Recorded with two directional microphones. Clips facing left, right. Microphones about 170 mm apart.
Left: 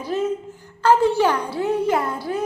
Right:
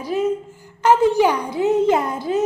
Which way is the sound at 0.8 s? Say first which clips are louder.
Right 2 dB; 15° right (ahead or behind).